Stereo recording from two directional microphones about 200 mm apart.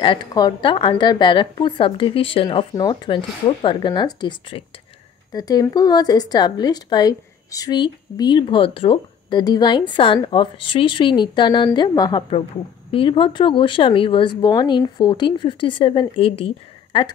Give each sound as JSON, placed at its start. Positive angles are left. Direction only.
{"t": 0.0, "sound": "speech", "side_deg": 25}